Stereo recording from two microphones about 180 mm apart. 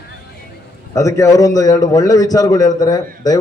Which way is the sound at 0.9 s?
15° left (ahead or behind).